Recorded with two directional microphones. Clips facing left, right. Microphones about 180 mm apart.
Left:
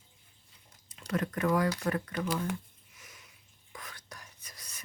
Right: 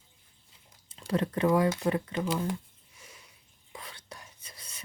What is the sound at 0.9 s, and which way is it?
Speech, 30° right (ahead or behind).